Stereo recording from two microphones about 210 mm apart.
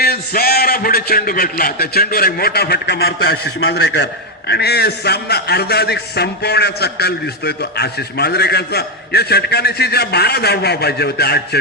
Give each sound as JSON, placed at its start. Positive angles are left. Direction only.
{"t": 0.0, "sound": "a man's voice", "side_deg": 45}